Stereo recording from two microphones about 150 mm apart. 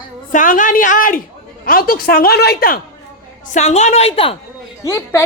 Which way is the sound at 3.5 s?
50° left (ahead or behind).